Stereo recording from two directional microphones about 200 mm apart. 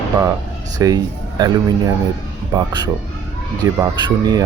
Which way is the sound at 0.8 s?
20° right (ahead or behind).